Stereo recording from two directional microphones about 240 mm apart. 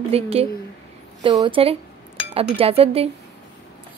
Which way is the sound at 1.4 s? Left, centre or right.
Right.